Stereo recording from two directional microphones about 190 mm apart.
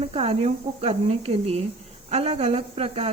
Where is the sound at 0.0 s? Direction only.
30° right (ahead or behind).